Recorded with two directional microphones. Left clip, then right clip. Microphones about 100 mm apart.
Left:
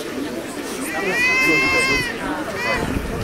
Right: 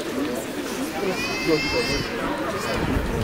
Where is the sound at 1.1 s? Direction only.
25° left (ahead or behind).